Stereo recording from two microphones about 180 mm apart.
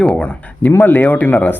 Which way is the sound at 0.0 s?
5° left (ahead or behind).